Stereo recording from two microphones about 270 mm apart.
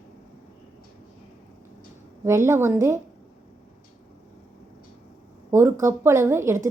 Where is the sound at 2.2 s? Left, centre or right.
Centre.